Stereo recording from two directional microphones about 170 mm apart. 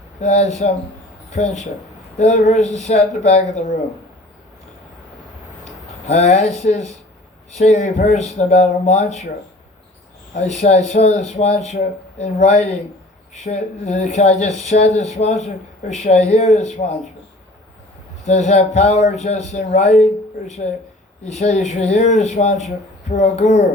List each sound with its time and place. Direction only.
0.2 s speech: 45° left (ahead or behind)
5.6 s speech: 45° left (ahead or behind)
10.4 s speech: 45° left (ahead or behind)
18.3 s speech: 40° left (ahead or behind)
21.2 s speech: 45° left (ahead or behind)